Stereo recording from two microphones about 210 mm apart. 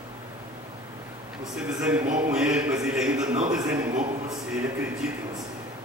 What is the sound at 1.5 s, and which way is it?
A man's voice, 5° right (ahead or behind).